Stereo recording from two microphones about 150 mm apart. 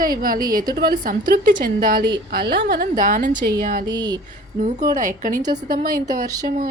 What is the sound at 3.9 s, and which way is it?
Speech, 30° right (ahead or behind).